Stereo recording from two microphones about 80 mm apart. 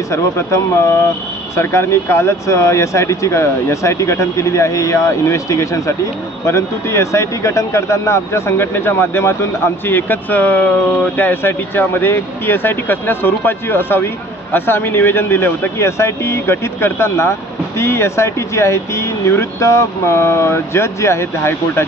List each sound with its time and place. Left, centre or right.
0.1 s speech: left